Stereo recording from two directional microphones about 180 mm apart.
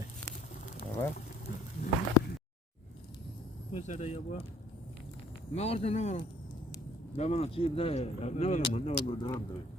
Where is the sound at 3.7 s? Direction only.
40° left (ahead or behind).